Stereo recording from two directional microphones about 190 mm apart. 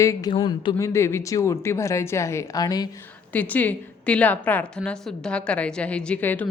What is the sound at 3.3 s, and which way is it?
A woman's voice, 10° left (ahead or behind).